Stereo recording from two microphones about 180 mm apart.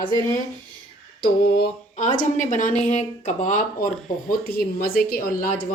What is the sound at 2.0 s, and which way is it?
Speech, 45° left (ahead or behind).